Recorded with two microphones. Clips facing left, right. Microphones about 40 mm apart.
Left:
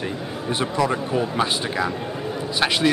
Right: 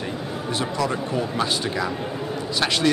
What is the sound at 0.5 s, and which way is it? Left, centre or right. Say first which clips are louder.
Speech: left 3 dB; left.